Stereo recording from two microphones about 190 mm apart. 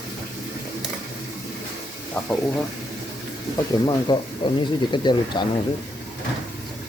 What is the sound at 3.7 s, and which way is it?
Speech, 20° left (ahead or behind).